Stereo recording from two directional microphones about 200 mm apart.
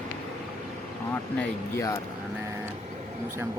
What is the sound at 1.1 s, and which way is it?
Speech, 10° left (ahead or behind).